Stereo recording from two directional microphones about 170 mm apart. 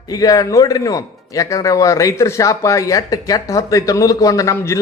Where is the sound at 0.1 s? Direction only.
20° left (ahead or behind).